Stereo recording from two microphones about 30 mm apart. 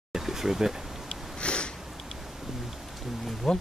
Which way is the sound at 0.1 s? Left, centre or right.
Centre.